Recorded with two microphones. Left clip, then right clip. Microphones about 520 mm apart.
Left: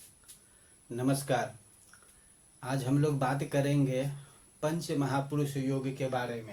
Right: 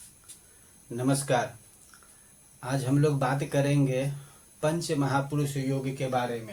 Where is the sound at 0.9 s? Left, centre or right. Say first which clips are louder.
Right 4 dB; left.